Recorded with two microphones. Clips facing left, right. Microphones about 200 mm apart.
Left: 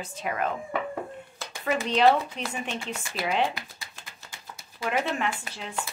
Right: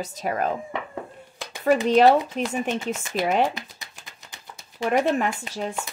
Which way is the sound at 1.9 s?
45° right (ahead or behind).